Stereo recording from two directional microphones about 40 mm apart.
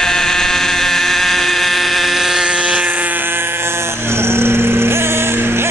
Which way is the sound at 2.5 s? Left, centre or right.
Right.